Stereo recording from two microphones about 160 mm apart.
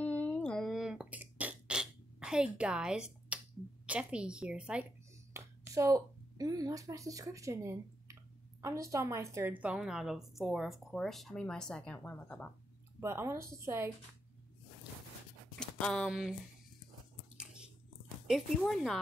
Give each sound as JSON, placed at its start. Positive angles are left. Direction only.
{"t": 0.0, "sound": "beatboxing", "side_deg": 10}
{"t": 3.8, "sound": "a woman's voice", "side_deg": -5}
{"t": 5.3, "sound": "a woman's voice", "side_deg": -15}
{"t": 13.0, "sound": "a woman's voice", "side_deg": -15}
{"t": 15.6, "sound": "speech", "side_deg": 5}
{"t": 18.2, "sound": "a woman's voice", "side_deg": 0}